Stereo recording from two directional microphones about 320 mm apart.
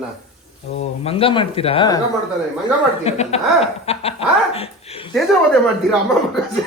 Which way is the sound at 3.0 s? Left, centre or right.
Centre.